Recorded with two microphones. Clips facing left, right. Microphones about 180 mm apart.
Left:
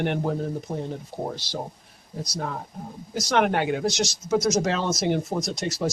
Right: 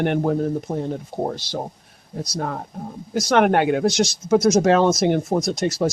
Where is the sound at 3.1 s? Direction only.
55° right (ahead or behind).